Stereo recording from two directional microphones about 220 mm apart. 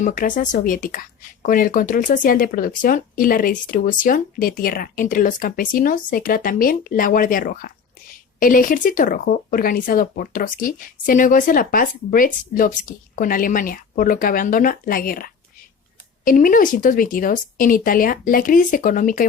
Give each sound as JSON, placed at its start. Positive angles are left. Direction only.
{"t": 0.0, "sound": "speech", "side_deg": 35}